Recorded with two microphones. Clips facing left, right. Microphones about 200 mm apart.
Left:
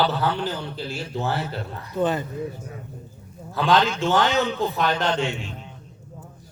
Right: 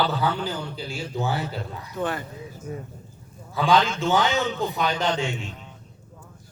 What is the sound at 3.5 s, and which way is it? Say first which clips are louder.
A man's voice: left 1 dB; centre (ahead or behind).